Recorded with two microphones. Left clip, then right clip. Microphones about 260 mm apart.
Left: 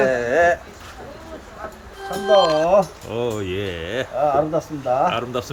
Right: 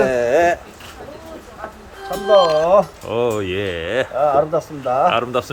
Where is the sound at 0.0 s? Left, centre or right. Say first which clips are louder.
Right 2 dB; right.